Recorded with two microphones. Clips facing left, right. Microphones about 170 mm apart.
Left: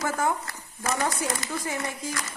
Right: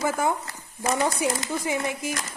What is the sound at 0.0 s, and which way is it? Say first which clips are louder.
Speech: right 2 dB; 15° right (ahead or behind).